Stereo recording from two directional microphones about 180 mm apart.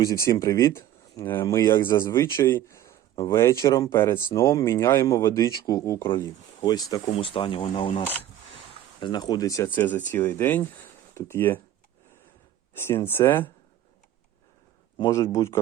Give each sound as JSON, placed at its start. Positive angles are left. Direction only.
{"t": 0.0, "sound": "speech", "side_deg": 20}
{"t": 7.0, "sound": "speech", "side_deg": 30}
{"t": 12.7, "sound": "speech", "side_deg": 15}
{"t": 14.9, "sound": "speech", "side_deg": 20}